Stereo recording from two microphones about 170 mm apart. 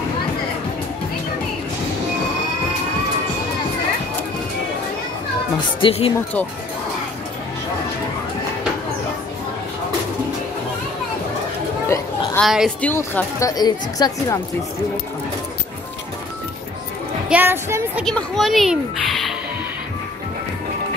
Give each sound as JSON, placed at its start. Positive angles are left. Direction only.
{"t": 5.8, "sound": "speech", "side_deg": 30}
{"t": 12.4, "sound": "speech", "side_deg": 0}
{"t": 12.8, "sound": "speech", "side_deg": 10}
{"t": 17.3, "sound": "a woman's voice", "side_deg": -10}
{"t": 18.0, "sound": "speech", "side_deg": 0}